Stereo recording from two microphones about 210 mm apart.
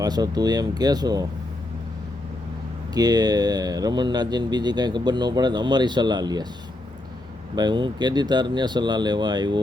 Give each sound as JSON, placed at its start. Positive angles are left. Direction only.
{"t": 0.0, "sound": "speech", "side_deg": -20}
{"t": 2.9, "sound": "speech", "side_deg": -20}
{"t": 7.5, "sound": "speech", "side_deg": -20}